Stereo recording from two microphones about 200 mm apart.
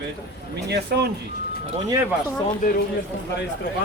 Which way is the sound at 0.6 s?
55° right (ahead or behind).